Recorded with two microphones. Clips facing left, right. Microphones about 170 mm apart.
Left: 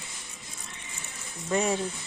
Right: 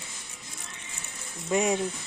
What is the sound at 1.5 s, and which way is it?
Speech, 15° right (ahead or behind).